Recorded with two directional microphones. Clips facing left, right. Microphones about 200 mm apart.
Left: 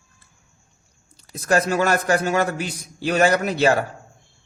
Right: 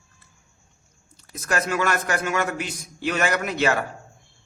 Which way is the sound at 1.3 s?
30° left (ahead or behind).